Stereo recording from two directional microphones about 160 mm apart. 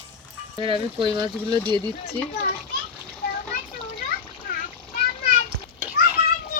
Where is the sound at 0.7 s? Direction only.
30° right (ahead or behind).